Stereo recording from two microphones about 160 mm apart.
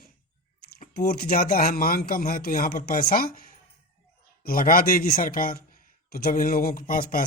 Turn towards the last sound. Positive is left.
turn(degrees=60)  # may be behind; listen again after turning